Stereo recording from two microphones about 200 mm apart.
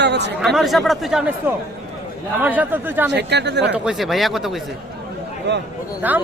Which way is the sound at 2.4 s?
10° right (ahead or behind).